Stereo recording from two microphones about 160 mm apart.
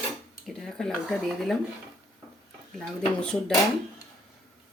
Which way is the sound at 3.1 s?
5° left (ahead or behind).